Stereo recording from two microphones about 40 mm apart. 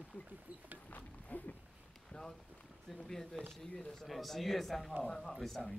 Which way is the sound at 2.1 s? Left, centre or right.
Left.